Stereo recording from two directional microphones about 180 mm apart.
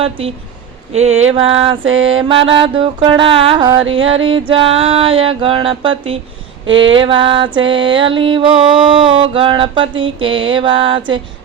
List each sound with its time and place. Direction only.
0.9 s a sound: 35° right (ahead or behind)
1.8 s mantra: 90° right
2.2 s mantra: 30° right (ahead or behind)
3.8 s mantra: 90° right
4.3 s a sound: 30° right (ahead or behind)
6.7 s mantra: 90° right
6.9 s mantra: 30° right (ahead or behind)